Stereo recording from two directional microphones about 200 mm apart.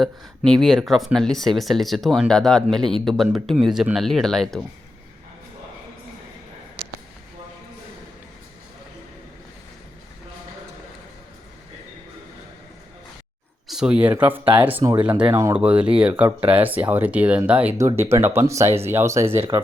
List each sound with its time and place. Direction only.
0.0 s speech: centre (ahead or behind)
13.7 s speech: 5° right (ahead or behind)
14.4 s speech: 25° right (ahead or behind)
14.9 s speech: 10° right (ahead or behind)